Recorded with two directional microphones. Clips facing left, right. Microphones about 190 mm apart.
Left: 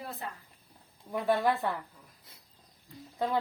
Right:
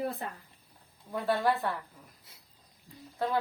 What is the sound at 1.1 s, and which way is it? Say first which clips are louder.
Speech: left 1 dB; 15° left (ahead or behind).